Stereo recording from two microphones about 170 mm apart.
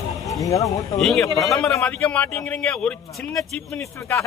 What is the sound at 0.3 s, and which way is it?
Speech, 20° left (ahead or behind).